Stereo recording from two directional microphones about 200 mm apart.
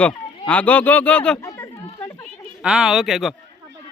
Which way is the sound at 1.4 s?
15° left (ahead or behind).